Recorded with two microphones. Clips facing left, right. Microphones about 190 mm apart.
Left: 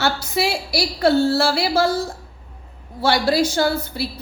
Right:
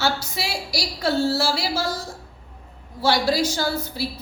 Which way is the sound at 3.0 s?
60° left (ahead or behind).